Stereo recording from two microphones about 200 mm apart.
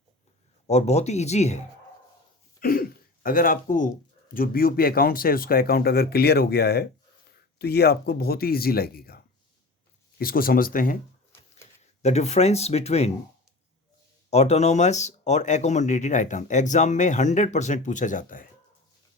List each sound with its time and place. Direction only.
0.7 s speech: 35° left (ahead or behind)
2.6 s throat clearing: 45° left (ahead or behind)
3.2 s speech: 45° left (ahead or behind)
12.0 s speech: 35° left (ahead or behind)
14.3 s speech: 35° left (ahead or behind)